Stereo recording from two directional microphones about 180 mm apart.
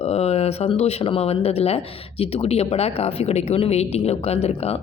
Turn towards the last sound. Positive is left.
turn(degrees=35)  # may be behind; listen again after turning